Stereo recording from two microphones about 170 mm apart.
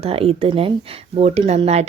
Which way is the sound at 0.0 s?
35° right (ahead or behind).